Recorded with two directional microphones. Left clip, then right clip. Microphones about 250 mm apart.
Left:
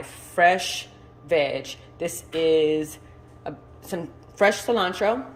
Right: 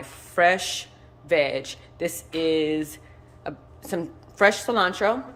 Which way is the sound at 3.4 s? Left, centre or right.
Centre.